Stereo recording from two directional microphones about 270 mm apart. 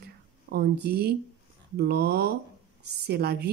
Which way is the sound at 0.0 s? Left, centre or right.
Right.